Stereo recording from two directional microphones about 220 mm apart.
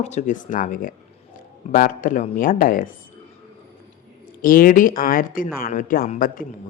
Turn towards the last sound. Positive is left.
turn(degrees=40)  # may be behind; listen again after turning